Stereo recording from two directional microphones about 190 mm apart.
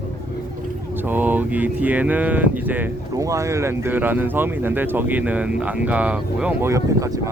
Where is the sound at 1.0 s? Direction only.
10° right (ahead or behind).